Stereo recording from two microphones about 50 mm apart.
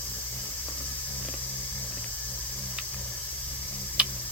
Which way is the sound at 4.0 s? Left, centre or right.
Right.